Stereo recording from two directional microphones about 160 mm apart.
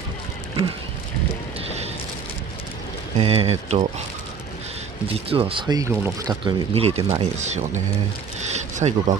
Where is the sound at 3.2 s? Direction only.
40° right (ahead or behind).